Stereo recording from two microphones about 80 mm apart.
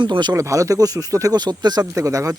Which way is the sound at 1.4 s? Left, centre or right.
Right.